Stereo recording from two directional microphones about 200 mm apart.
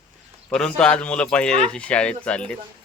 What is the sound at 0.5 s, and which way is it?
Speech, 5° left (ahead or behind).